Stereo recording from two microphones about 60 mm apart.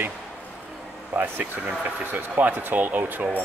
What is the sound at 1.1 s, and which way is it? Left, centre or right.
Speech, right.